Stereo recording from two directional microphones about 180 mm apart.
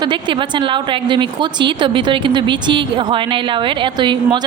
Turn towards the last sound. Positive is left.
turn(degrees=-25)  # may be behind; listen again after turning